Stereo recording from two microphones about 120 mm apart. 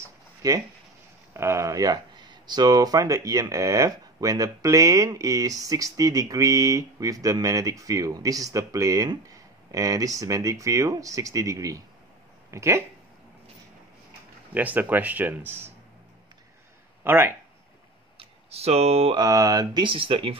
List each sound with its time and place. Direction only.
0.4 s speech: 30° right (ahead or behind)
14.5 s speech: 15° right (ahead or behind)
17.0 s speech: 20° right (ahead or behind)
18.2 s speech: 60° right (ahead or behind)
19.1 s speech: 30° right (ahead or behind); by 20.3 s 50° right (ahead or behind)